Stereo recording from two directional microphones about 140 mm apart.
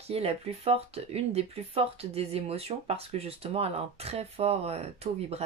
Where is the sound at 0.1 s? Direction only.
45° right (ahead or behind).